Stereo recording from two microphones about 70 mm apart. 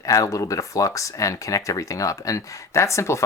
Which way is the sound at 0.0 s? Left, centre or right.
Left.